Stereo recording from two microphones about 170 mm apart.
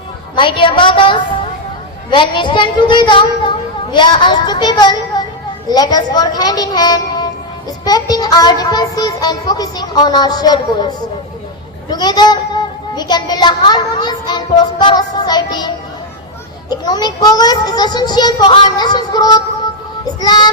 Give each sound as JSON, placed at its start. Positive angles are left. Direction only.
{"t": 0.3, "sound": "a child's voice", "side_deg": 30}